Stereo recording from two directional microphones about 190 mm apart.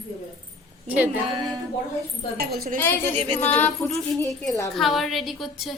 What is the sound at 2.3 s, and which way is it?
Speech, 50° right (ahead or behind).